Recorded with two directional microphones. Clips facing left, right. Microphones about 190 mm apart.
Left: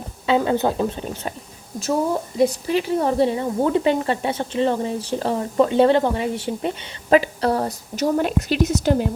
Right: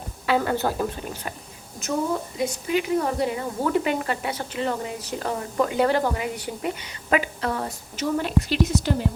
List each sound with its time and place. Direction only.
0.3 s speech: 20° left (ahead or behind)
2.4 s a woman's voice: 35° left (ahead or behind)